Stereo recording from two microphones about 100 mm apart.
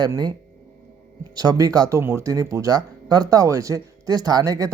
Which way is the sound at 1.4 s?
40° right (ahead or behind).